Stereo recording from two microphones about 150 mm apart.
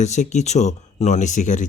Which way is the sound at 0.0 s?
50° left (ahead or behind).